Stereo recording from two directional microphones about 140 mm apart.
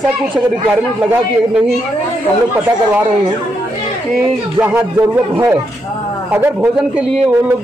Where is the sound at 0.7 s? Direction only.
5° right (ahead or behind).